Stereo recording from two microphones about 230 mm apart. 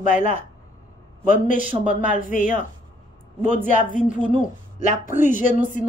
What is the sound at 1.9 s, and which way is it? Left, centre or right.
Speech, left.